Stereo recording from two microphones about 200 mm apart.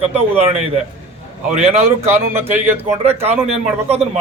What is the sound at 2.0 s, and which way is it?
A man's voice, 10° right (ahead or behind).